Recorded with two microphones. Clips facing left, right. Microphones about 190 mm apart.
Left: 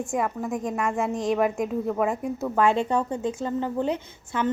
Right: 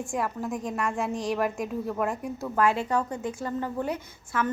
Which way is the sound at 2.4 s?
25° left (ahead or behind).